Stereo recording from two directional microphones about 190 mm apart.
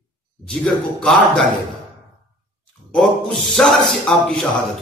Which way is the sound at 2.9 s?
5° left (ahead or behind).